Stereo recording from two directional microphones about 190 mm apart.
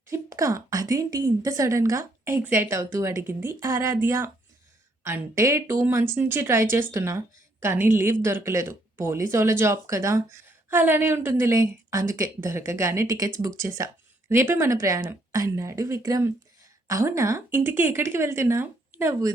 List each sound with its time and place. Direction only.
0.1 s speech: 15° right (ahead or behind)